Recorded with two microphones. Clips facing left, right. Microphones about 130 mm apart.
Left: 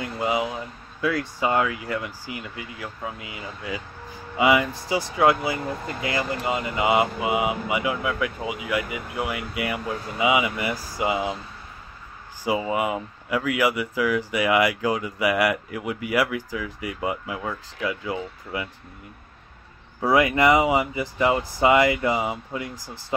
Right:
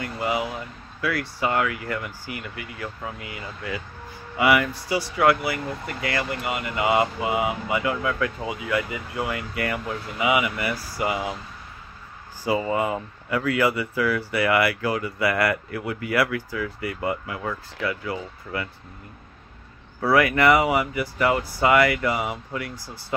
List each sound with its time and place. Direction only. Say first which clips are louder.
0.0 s speech: left 1 dB; 20° left (ahead or behind)
12.4 s speech: right 1 dB; 10° left (ahead or behind)
20.0 s speech: even; 20° left (ahead or behind)